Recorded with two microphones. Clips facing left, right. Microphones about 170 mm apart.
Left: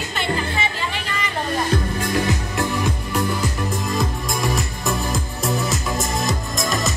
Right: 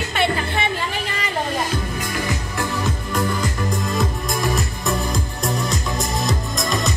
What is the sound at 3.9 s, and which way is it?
Music, centre (ahead or behind).